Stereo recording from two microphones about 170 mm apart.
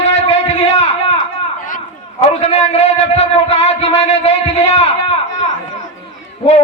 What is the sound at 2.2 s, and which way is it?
A man's voice, 40° left (ahead or behind).